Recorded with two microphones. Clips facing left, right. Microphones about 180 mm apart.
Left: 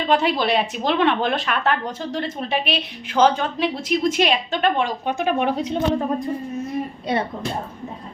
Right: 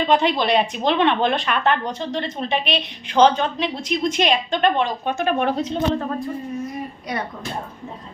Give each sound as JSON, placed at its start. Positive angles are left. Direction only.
{"t": 0.1, "sound": "speech", "side_deg": 5}
{"t": 7.1, "sound": "speech", "side_deg": 30}